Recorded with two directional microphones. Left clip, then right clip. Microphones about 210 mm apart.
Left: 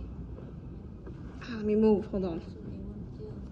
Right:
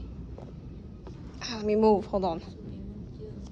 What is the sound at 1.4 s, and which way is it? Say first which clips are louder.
A woman's voice: right 3 dB; 20° right (ahead or behind).